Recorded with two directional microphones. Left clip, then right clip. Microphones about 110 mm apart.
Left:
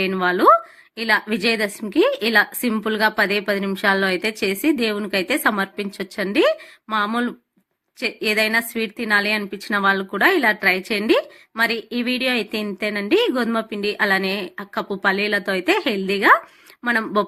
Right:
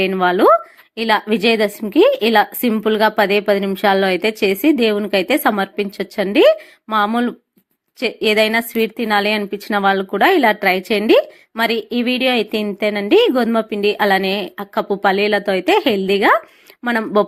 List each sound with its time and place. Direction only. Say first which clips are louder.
0.1 s a woman's voice: right 1 dB; 25° right (ahead or behind)